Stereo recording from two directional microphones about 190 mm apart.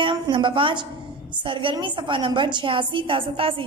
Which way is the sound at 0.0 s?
25° right (ahead or behind).